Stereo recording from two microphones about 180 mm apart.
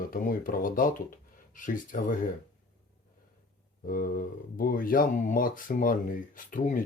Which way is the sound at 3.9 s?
50° left (ahead or behind).